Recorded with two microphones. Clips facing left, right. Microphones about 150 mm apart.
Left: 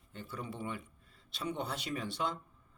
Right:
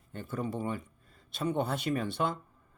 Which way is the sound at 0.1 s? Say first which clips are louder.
Right 8 dB; 50° right (ahead or behind).